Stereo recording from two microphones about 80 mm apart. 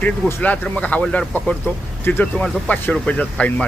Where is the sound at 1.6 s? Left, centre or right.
Left.